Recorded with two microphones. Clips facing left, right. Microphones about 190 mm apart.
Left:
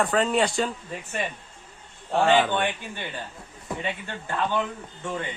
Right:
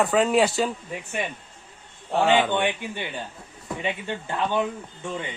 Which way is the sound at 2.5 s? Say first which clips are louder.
Right 2 dB; 15° right (ahead or behind).